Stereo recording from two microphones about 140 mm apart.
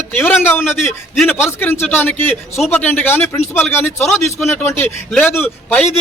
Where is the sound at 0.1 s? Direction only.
15° left (ahead or behind).